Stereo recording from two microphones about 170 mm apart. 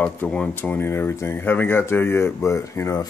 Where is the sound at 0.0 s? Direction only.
5° left (ahead or behind).